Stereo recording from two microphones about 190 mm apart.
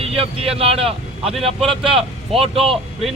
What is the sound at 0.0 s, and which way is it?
Speech, 30° right (ahead or behind).